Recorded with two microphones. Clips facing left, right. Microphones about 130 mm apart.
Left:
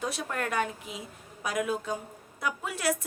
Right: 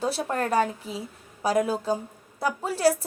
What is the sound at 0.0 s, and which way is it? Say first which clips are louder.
A woman's voice: right 6 dB; 35° right (ahead or behind).